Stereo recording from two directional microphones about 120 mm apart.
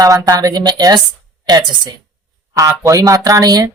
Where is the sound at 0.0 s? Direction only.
30° right (ahead or behind).